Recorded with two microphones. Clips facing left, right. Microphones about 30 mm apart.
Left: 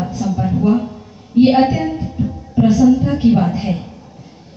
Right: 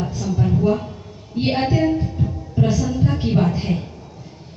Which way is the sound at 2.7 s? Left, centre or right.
Left.